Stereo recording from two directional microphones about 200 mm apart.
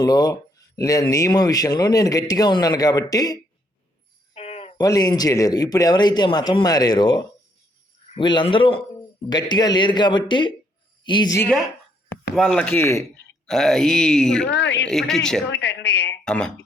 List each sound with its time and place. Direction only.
0.0 s speech: 20° left (ahead or behind)
4.4 s a sound: 30° left (ahead or behind)
4.8 s a man's voice: 20° left (ahead or behind)
12.3 s speech: centre (ahead or behind)
14.5 s a man's voice: 60° left (ahead or behind)
14.8 s speech: centre (ahead or behind)
15.4 s a man's voice: 60° left (ahead or behind)
16.2 s speech: 5° left (ahead or behind)